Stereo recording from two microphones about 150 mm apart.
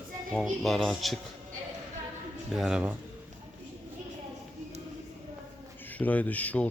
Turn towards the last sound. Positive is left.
turn(degrees=10)  # may be behind; listen again after turning